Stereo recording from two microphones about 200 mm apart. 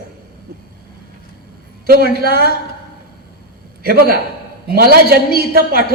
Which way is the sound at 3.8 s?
50° right (ahead or behind).